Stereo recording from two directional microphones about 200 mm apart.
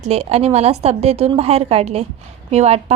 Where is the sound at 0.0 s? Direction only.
30° right (ahead or behind).